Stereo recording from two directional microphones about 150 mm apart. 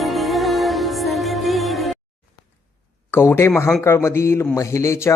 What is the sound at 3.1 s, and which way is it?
Speech, 15° left (ahead or behind).